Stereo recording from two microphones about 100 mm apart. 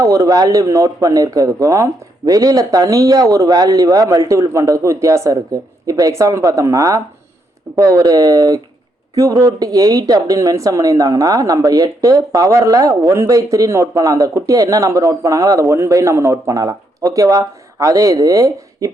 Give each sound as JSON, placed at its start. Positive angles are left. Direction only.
{"t": 0.0, "sound": "speech", "side_deg": -35}